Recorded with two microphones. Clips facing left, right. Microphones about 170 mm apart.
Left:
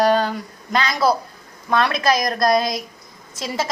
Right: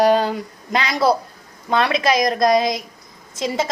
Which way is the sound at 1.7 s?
20° right (ahead or behind).